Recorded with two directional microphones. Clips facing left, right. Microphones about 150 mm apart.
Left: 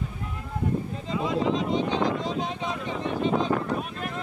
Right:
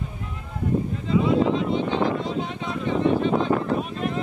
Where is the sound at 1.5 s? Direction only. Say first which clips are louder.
Right 2 dB; 60° right (ahead or behind).